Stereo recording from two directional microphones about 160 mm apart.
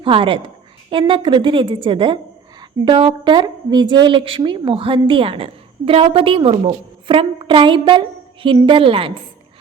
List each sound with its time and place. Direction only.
0.0 s a woman's voice: 35° right (ahead or behind)